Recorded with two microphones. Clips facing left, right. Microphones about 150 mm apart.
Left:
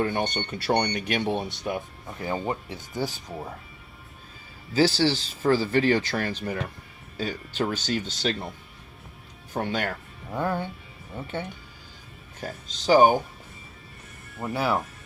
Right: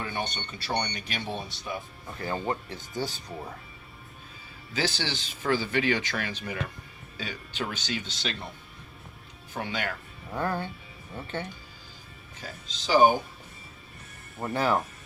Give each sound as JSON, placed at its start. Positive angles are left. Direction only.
{"t": 0.0, "sound": "speech", "side_deg": 55}
{"t": 2.1, "sound": "speech", "side_deg": 15}
{"t": 4.7, "sound": "speech", "side_deg": 35}
{"t": 9.5, "sound": "speech", "side_deg": 45}
{"t": 10.3, "sound": "speech", "side_deg": 10}
{"t": 12.4, "sound": "speech", "side_deg": 45}
{"t": 14.5, "sound": "speech", "side_deg": 5}